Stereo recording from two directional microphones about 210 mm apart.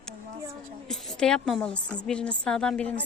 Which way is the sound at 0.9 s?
Centre (ahead or behind).